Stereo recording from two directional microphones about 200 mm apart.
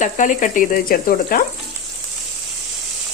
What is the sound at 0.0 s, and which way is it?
Speech, 40° left (ahead or behind).